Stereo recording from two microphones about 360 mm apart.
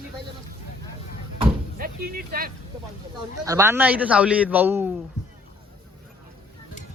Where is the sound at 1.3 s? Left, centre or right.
Centre.